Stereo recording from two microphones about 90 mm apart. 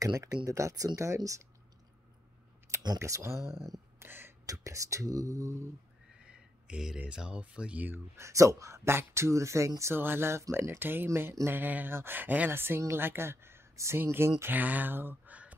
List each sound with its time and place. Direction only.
0.0 s speech: 40° right (ahead or behind)
3.0 s speech: 35° right (ahead or behind)
4.0 s a sound: 25° right (ahead or behind)
4.5 s speech: 35° right (ahead or behind)
6.1 s a sound: 10° right (ahead or behind)
7.0 s speech: 10° right (ahead or behind)
8.2 s speech: 35° right (ahead or behind); by 15.5 s 15° right (ahead or behind)